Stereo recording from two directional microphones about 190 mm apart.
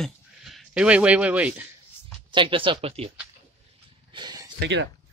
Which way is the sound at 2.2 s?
25° right (ahead or behind).